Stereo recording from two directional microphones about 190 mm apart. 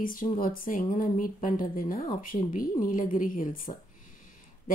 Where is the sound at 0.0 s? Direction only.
45° left (ahead or behind).